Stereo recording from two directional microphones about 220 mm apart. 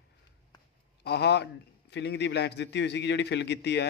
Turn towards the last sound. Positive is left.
turn(degrees=50)  # may be behind; listen again after turning